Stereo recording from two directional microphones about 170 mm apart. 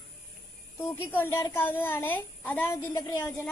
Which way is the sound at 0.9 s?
15° left (ahead or behind).